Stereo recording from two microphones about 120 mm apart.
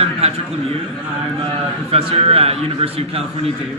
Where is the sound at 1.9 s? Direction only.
55° right (ahead or behind).